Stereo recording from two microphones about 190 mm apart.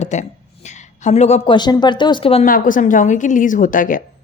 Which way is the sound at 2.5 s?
45° left (ahead or behind).